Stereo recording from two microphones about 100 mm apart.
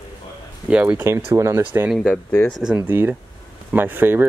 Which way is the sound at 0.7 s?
15° right (ahead or behind).